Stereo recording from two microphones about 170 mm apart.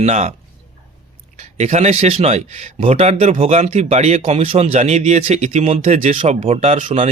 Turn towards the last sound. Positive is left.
turn(degrees=-40)  # may be behind; listen again after turning